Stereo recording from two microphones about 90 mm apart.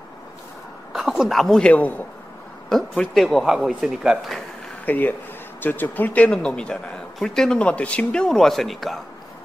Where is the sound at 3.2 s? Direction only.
Centre (ahead or behind).